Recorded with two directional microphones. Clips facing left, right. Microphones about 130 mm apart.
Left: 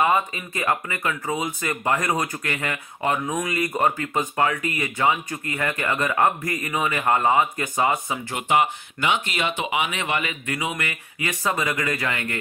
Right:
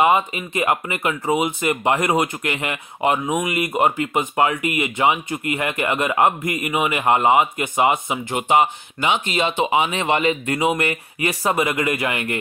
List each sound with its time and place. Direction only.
0.0 s speech: 20° right (ahead or behind)